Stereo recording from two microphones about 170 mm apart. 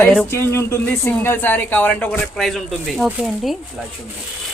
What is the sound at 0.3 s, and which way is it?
A woman's voice, 15° left (ahead or behind).